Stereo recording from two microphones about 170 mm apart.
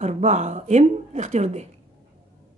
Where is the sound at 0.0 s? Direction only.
40° right (ahead or behind).